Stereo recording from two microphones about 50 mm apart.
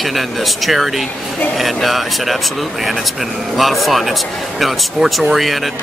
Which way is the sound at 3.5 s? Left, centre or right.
Centre.